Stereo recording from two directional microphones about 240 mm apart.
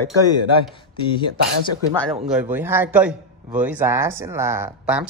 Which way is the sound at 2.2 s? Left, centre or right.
Centre.